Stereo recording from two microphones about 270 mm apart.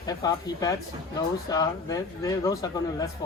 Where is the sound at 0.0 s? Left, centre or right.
Centre.